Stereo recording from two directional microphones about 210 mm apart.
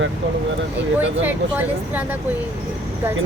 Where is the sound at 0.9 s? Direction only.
10° right (ahead or behind).